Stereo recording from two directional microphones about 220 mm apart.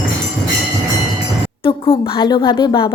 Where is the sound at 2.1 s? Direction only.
20° left (ahead or behind).